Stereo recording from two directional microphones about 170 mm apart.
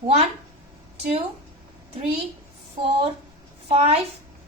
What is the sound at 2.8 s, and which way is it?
Speech, 30° right (ahead or behind).